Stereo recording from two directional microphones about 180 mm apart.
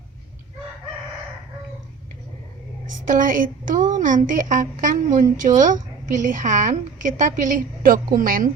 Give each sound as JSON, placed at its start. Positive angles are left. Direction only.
{"t": 3.1, "sound": "a woman's voice", "side_deg": -50}